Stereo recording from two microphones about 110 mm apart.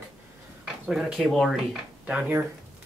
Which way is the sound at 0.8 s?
5° right (ahead or behind).